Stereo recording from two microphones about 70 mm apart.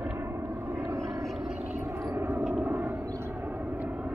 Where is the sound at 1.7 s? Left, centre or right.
Right.